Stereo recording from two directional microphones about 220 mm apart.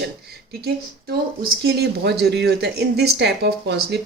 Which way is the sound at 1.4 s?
45° right (ahead or behind).